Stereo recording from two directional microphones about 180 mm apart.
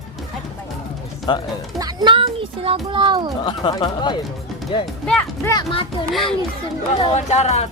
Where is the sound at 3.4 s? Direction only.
25° left (ahead or behind).